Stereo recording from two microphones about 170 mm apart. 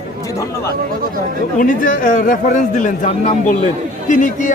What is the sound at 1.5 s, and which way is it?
A man's voice, 50° left (ahead or behind).